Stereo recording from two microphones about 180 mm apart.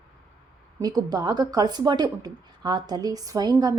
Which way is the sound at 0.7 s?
20° right (ahead or behind).